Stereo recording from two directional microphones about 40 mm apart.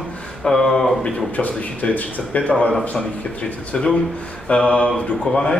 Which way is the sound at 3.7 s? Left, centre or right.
Centre.